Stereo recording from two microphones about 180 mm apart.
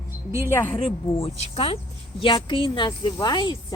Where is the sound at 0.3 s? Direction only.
15° right (ahead or behind).